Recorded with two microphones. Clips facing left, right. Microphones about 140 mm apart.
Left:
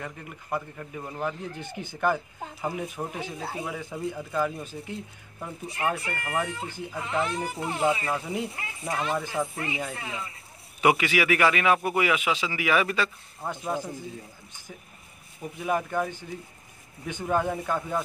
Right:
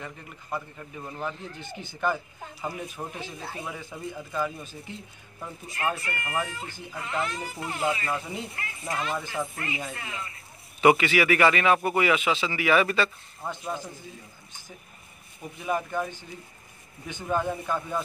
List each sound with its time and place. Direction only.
0.9 s a man's voice: 10° left (ahead or behind)
15.4 s a man's voice: 10° left (ahead or behind)
17.1 s a man's voice: 15° left (ahead or behind)